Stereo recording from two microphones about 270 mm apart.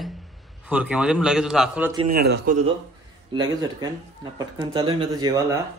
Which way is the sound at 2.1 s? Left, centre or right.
Right.